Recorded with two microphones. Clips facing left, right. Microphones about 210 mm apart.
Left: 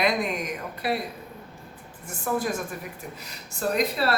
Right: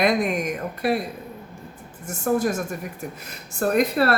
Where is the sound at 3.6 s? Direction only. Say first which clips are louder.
Right 5 dB; 55° right (ahead or behind).